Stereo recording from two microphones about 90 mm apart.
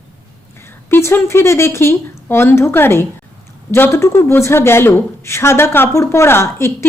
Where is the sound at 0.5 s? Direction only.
30° left (ahead or behind).